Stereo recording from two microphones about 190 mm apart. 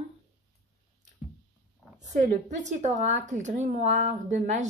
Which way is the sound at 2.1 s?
40° right (ahead or behind).